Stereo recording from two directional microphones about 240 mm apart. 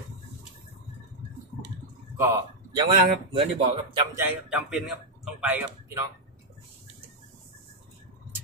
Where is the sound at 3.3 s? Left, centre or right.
Right.